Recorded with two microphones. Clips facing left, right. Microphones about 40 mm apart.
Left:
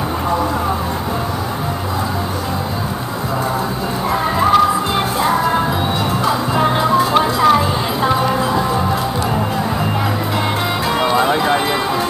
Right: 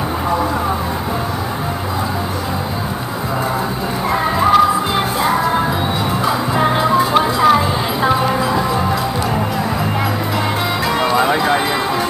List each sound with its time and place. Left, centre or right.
4.4 s music: centre
11.1 s clip-clop: centre